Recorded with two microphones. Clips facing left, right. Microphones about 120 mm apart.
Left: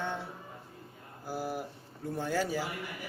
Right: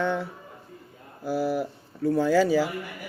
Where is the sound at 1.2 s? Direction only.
80° right.